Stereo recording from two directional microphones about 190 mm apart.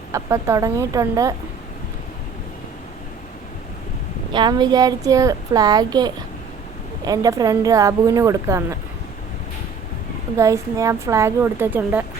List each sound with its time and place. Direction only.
0.1 s a woman's voice: 15° right (ahead or behind)
4.3 s a woman's voice: 25° right (ahead or behind)
10.3 s a woman's voice: 15° right (ahead or behind)